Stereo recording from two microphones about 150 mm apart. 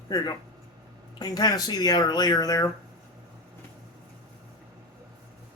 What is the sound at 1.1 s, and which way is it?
Speech, 25° left (ahead or behind).